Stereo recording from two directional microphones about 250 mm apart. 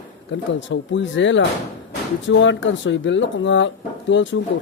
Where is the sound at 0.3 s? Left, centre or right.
Left.